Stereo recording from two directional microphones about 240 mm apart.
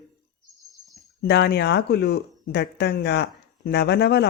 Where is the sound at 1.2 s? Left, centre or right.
Left.